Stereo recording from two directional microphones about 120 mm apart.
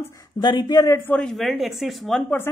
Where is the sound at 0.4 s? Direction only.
35° left (ahead or behind).